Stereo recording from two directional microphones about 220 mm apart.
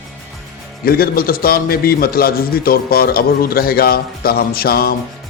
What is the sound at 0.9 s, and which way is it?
Music, 45° left (ahead or behind).